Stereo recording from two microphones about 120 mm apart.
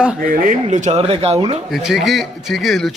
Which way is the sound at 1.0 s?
55° right (ahead or behind).